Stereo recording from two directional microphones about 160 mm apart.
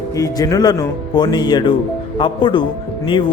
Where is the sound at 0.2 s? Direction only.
20° left (ahead or behind).